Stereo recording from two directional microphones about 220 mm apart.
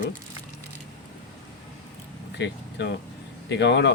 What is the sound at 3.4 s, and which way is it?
Speech, 55° left (ahead or behind).